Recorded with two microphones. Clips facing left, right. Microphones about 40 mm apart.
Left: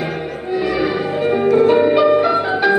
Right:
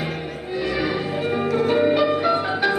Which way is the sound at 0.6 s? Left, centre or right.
Centre.